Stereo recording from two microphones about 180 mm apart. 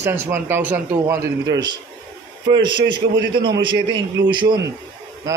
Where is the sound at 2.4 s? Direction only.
25° right (ahead or behind).